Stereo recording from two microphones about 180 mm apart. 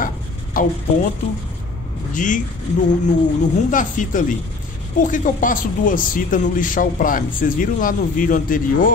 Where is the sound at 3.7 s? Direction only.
45° left (ahead or behind).